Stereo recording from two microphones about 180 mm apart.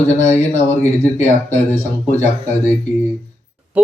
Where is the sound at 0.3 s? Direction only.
40° left (ahead or behind).